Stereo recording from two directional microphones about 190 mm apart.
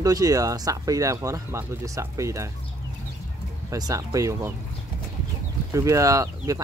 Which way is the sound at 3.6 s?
20° right (ahead or behind).